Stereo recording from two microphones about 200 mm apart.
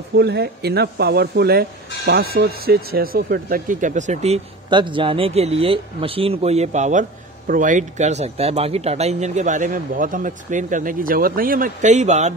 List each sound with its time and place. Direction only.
0.1 s speech: 55° right (ahead or behind); by 12.4 s 35° right (ahead or behind)